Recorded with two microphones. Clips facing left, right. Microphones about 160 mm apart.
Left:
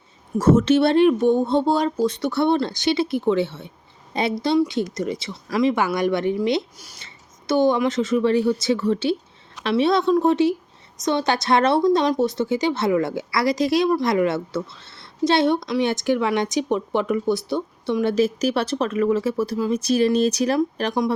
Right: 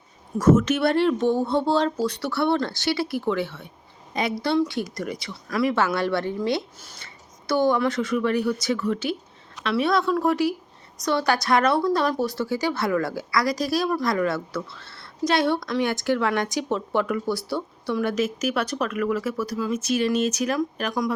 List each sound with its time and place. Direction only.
0.3 s a woman's voice: 30° left (ahead or behind)
4.4 s a woman's voice: 15° left (ahead or behind)